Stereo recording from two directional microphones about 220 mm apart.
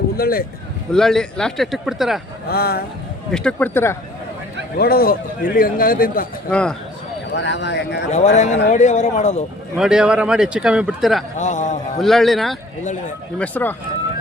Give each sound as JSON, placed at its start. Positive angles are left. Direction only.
{"t": 0.2, "sound": "a man's voice", "side_deg": 40}
{"t": 0.9, "sound": "a man's voice", "side_deg": 0}
{"t": 2.5, "sound": "speech", "side_deg": 45}
{"t": 3.3, "sound": "speech", "side_deg": 5}
{"t": 4.8, "sound": "a man's voice", "side_deg": 45}
{"t": 6.5, "sound": "a man's voice", "side_deg": 5}
{"t": 7.3, "sound": "speech", "side_deg": 55}
{"t": 8.1, "sound": "a man's voice", "side_deg": 30}
{"t": 9.7, "sound": "a man's voice", "side_deg": -5}
{"t": 11.3, "sound": "a man's voice", "side_deg": 35}
{"t": 11.9, "sound": "a man's voice", "side_deg": 0}